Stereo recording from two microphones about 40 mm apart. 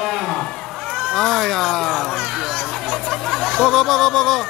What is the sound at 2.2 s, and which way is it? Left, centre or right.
Children playing, centre.